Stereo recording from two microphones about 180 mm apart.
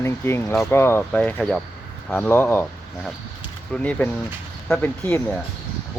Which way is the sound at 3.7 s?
5° left (ahead or behind).